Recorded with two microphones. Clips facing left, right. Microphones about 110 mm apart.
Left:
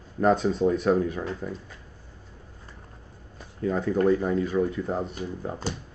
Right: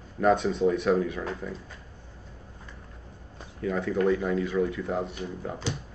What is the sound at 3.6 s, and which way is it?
Speech, 25° left (ahead or behind).